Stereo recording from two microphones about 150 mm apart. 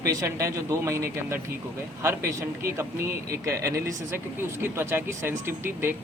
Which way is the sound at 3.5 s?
20° right (ahead or behind).